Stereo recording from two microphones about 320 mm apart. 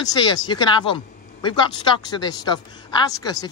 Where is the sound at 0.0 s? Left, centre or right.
Centre.